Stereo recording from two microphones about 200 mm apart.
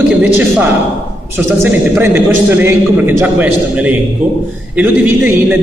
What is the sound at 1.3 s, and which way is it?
A man's voice, 10° right (ahead or behind).